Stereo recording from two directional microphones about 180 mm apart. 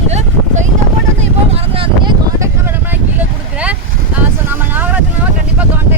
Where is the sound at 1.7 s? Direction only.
30° right (ahead or behind).